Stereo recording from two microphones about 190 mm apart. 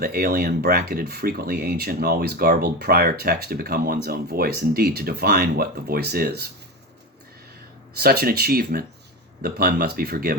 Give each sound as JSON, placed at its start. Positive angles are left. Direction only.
{"t": 0.0, "sound": "speech", "side_deg": -55}
{"t": 7.9, "sound": "speech", "side_deg": -55}